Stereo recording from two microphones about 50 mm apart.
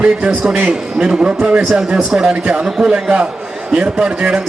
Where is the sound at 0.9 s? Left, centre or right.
Centre.